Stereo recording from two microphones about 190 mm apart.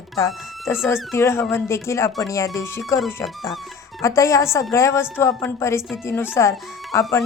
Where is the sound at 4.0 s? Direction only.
15° left (ahead or behind).